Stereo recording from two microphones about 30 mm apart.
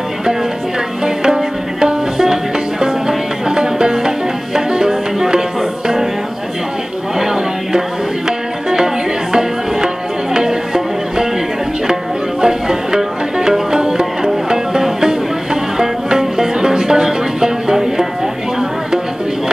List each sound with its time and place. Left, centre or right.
1.0 s music: right
8.3 s music: right